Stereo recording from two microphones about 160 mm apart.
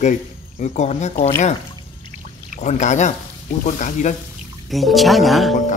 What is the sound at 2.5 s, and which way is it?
Speech, 45° left (ahead or behind).